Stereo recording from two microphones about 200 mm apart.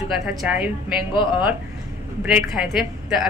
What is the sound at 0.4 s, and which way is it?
Speech, 5° right (ahead or behind).